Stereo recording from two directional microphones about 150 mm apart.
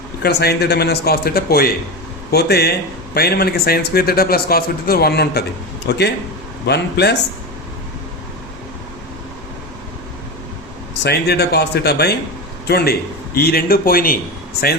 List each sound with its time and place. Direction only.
0.2 s a man's voice: 90° left
6.7 s a man's voice: 90° left
11.0 s a man's voice: 90° left; by 14.2 s 75° left (ahead or behind)